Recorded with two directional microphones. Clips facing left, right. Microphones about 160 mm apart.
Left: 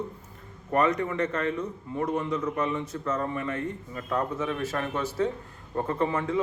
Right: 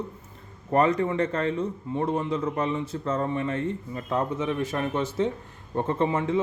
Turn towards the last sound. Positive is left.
turn(degrees=-25)  # may be behind; listen again after turning